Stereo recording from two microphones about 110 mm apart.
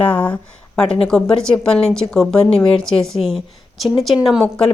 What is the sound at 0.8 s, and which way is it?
Speech, 60° left (ahead or behind).